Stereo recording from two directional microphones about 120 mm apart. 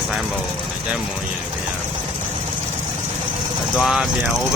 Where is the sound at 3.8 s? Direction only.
5° right (ahead or behind).